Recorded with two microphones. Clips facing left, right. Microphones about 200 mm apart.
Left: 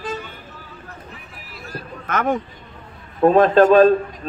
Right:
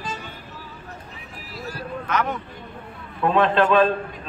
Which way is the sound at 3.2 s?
40° left (ahead or behind).